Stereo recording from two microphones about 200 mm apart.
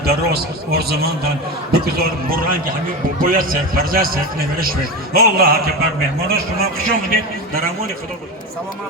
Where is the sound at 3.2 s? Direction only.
45° right (ahead or behind).